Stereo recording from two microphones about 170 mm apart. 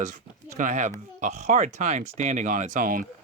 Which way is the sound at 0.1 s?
50° right (ahead or behind).